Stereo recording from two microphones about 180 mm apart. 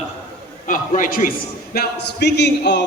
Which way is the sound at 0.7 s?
50° left (ahead or behind).